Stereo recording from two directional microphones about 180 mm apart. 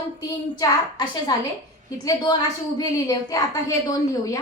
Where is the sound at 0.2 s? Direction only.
20° left (ahead or behind).